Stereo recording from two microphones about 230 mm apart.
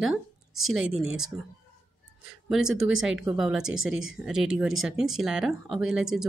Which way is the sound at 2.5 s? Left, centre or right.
Centre.